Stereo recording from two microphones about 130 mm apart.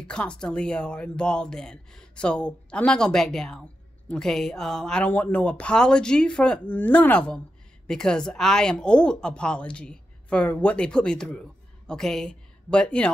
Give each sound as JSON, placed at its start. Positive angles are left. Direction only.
{"t": 0.0, "sound": "a woman's voice", "side_deg": 10}